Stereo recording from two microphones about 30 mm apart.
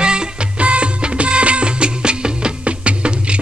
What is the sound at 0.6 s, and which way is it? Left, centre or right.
Music, right.